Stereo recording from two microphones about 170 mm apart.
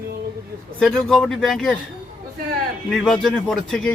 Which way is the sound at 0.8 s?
5° left (ahead or behind).